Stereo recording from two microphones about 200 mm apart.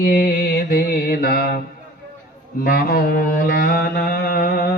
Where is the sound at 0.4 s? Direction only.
55° left (ahead or behind).